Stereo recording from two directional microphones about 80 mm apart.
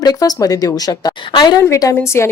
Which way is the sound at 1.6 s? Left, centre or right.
Left.